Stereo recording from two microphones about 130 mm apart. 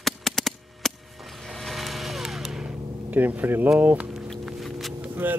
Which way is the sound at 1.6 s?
Centre (ahead or behind).